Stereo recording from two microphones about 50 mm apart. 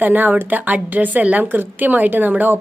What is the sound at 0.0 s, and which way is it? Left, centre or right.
Speech, right.